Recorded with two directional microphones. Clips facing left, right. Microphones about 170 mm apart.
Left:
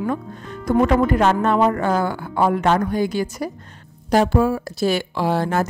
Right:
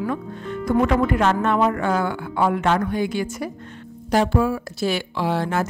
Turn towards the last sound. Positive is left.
turn(degrees=40)  # may be behind; listen again after turning